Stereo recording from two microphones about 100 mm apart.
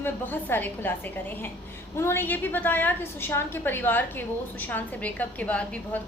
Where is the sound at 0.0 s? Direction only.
20° left (ahead or behind).